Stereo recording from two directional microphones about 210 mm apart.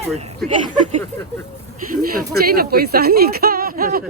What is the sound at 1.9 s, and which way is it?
Speech, 45° right (ahead or behind).